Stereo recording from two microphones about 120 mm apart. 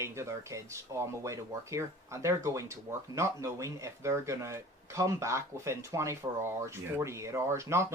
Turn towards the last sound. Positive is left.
turn(degrees=-25)  # may be behind; listen again after turning